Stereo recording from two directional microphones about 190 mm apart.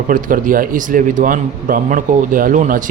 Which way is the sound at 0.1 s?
45° right (ahead or behind).